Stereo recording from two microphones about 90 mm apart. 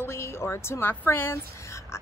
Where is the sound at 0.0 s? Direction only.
30° left (ahead or behind).